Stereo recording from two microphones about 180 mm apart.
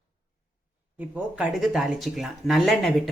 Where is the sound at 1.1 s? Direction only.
5° right (ahead or behind).